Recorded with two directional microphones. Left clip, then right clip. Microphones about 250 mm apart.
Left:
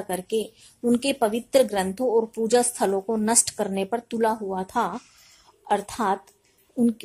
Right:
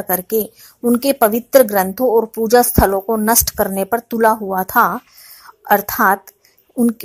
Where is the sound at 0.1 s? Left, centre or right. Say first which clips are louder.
Right 8 dB; centre.